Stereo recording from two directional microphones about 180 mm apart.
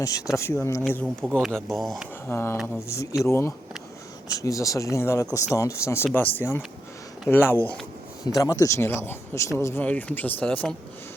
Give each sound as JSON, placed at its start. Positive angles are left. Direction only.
{"t": 0.3, "sound": "speech", "side_deg": 15}
{"t": 1.3, "sound": "speech", "side_deg": 0}
{"t": 2.3, "sound": "speech", "side_deg": 15}